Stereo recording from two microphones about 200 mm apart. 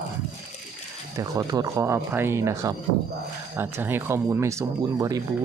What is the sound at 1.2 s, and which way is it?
Speech, 15° right (ahead or behind).